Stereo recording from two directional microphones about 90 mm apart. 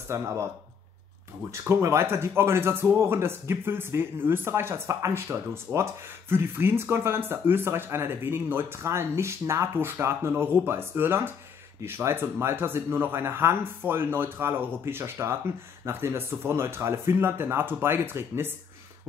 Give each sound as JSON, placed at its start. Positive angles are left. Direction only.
{"t": 0.1, "sound": "speech", "side_deg": -30}
{"t": 1.5, "sound": "speech", "side_deg": -30}